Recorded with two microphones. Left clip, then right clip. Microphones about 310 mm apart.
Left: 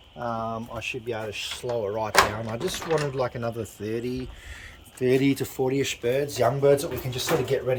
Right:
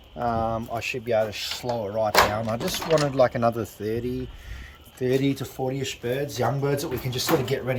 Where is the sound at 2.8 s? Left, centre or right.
Right.